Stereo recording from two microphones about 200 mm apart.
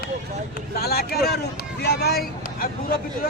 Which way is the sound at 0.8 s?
50° left (ahead or behind).